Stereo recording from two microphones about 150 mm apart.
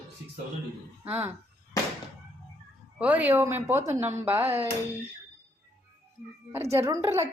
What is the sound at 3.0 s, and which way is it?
A woman's voice, 10° right (ahead or behind).